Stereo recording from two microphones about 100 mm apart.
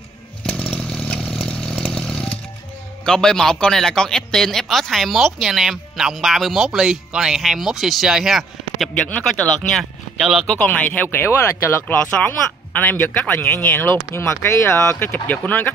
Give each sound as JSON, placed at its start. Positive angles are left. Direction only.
{"t": 0.5, "sound": "chainsaw", "side_deg": 10}
{"t": 3.1, "sound": "a man's voice", "side_deg": 5}
{"t": 9.0, "sound": "speech", "side_deg": 10}